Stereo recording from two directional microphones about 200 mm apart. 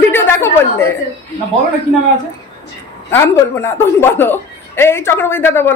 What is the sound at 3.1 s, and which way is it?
Speech, 10° left (ahead or behind).